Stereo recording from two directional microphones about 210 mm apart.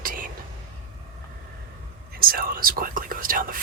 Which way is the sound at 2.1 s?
45° right (ahead or behind).